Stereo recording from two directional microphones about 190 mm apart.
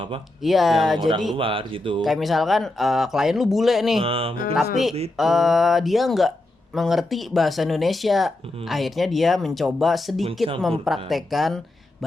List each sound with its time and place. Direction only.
0.4 s speech: centre (ahead or behind)
1.4 s speech: 30° right (ahead or behind)
2.0 s speech: centre (ahead or behind)
4.0 s speech: 30° right (ahead or behind)
4.5 s speech: centre (ahead or behind)